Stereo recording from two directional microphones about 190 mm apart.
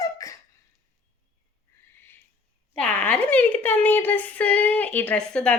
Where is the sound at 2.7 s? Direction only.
5° left (ahead or behind).